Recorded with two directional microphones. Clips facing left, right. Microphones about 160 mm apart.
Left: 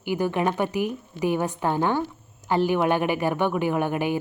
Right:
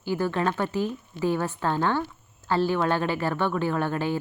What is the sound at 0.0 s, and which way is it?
A woman's voice, 15° left (ahead or behind).